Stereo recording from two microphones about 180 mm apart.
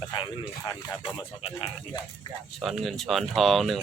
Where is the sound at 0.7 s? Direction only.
25° left (ahead or behind).